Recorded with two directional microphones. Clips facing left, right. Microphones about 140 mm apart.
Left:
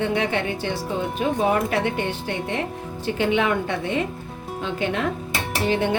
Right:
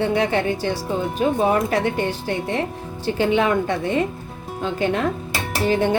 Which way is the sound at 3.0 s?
35° right (ahead or behind).